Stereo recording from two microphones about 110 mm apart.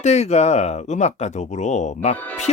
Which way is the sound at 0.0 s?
90° left.